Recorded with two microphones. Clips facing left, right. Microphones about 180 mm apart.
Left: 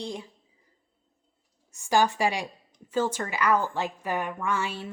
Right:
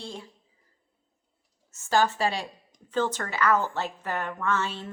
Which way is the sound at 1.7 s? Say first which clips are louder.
Left 1 dB; 15° left (ahead or behind).